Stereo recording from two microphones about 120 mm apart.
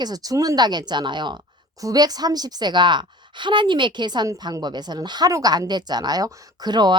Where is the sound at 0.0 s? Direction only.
30° right (ahead or behind).